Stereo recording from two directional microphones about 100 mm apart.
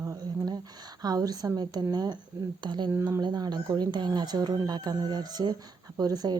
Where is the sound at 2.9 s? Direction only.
25° right (ahead or behind).